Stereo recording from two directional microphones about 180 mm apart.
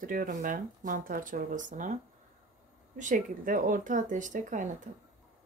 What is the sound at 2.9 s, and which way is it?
Speech, 45° right (ahead or behind).